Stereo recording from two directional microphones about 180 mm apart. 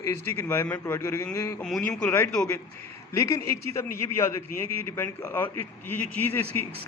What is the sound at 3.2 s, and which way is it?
A man's voice, 15° left (ahead or behind).